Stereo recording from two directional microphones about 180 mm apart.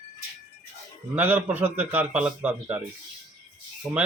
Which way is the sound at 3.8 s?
15° right (ahead or behind).